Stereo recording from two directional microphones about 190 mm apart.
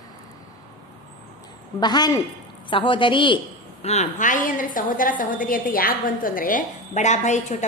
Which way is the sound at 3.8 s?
35° left (ahead or behind).